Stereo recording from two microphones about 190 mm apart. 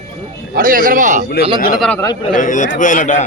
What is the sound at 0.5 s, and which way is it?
Speech, 45° right (ahead or behind).